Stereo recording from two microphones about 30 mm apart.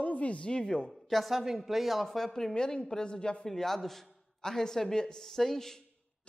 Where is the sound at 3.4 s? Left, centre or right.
Centre.